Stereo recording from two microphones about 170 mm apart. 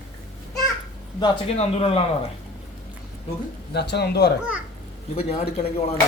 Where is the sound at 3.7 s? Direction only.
80° left.